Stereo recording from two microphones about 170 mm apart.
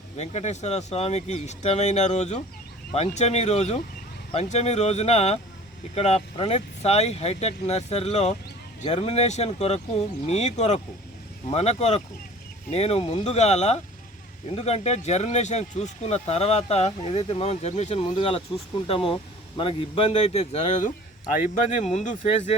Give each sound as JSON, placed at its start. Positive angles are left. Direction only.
{"t": 0.2, "sound": "speech", "side_deg": 40}